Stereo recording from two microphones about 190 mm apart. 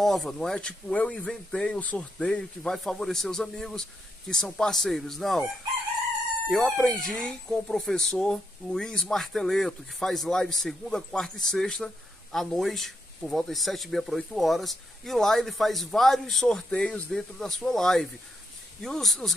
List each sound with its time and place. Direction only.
0.0 s speech: centre (ahead or behind)
6.5 s speech: centre (ahead or behind)